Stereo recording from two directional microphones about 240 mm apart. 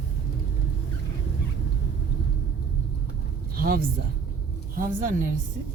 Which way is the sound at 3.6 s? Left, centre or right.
Right.